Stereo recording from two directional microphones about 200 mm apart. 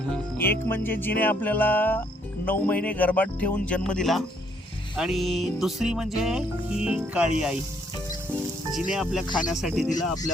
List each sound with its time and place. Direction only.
0.3 s speech: 10° left (ahead or behind)
8.7 s speech: centre (ahead or behind)